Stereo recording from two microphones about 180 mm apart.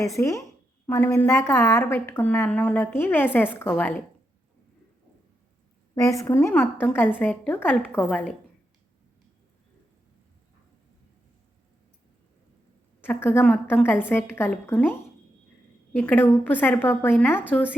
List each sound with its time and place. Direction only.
0.2 s a woman's voice: 15° left (ahead or behind)
5.9 s a woman's voice: 15° left (ahead or behind)
13.0 s a woman's voice: 10° left (ahead or behind)